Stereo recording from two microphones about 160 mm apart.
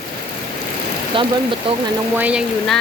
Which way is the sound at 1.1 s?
35° right (ahead or behind).